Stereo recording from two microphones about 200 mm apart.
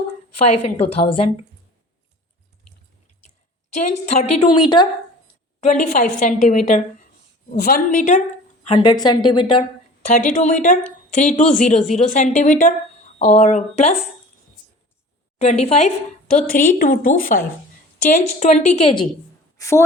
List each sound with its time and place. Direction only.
0.6 s a woman's voice: 30° left (ahead or behind)
3.8 s a woman's voice: 40° left (ahead or behind)
4.5 s a woman's voice: 20° left (ahead or behind)
5.5 s a woman's voice: 35° left (ahead or behind)
7.5 s a woman's voice: 50° left (ahead or behind)
8.6 s a woman's voice: 25° left (ahead or behind)
10.1 s a woman's voice: 40° left (ahead or behind)
15.4 s a woman's voice: 30° left (ahead or behind)
16.3 s a woman's voice: 45° left (ahead or behind); by 19.0 s 30° left (ahead or behind)
19.5 s a woman's voice: 15° left (ahead or behind)